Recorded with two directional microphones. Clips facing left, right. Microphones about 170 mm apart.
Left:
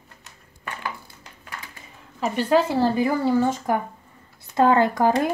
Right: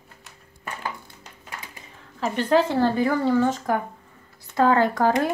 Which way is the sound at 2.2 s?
10° left (ahead or behind).